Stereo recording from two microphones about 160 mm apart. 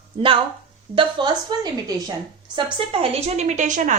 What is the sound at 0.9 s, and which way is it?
Speech, 30° right (ahead or behind).